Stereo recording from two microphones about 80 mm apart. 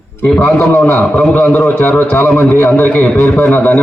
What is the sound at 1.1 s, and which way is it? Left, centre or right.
Speech, centre.